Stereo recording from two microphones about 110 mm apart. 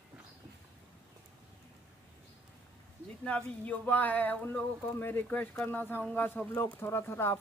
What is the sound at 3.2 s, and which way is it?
Speech, 10° left (ahead or behind).